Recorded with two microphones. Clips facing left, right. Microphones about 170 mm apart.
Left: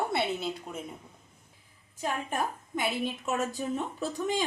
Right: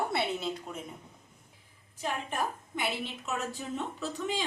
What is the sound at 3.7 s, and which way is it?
Speech, 45° left (ahead or behind).